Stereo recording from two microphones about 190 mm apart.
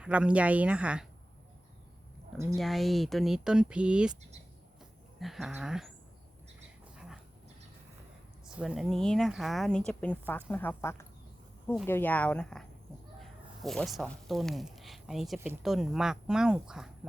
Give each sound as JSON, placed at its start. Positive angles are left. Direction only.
{"t": 0.0, "sound": "speech", "side_deg": -5}
{"t": 2.6, "sound": "a woman's voice", "side_deg": 0}
{"t": 4.8, "sound": "a sound", "side_deg": 0}
{"t": 6.9, "sound": "dog", "side_deg": -5}
{"t": 8.5, "sound": "a woman's voice", "side_deg": 0}